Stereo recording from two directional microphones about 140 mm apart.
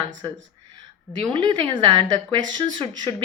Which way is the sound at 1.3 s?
35° right (ahead or behind).